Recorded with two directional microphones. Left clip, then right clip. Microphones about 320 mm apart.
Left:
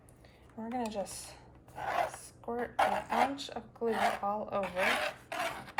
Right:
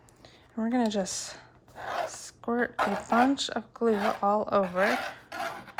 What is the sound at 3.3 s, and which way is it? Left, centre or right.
Speech, centre.